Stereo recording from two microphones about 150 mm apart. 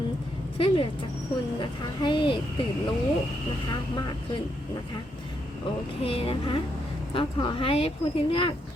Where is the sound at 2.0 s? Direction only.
30° left (ahead or behind).